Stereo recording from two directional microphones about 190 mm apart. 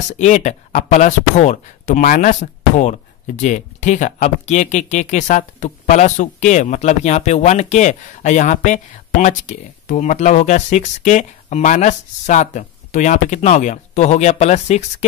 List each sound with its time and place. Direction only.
0.2 s speech: 40° left (ahead or behind)